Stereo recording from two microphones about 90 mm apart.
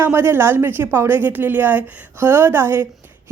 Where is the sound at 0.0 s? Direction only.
25° right (ahead or behind).